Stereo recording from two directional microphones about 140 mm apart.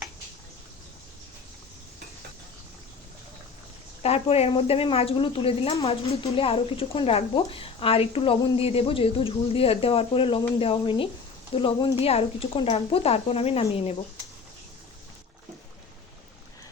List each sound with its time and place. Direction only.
4.0 s speech: 45° left (ahead or behind)